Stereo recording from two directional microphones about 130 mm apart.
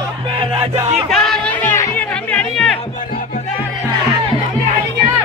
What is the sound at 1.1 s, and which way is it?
Music, 5° left (ahead or behind).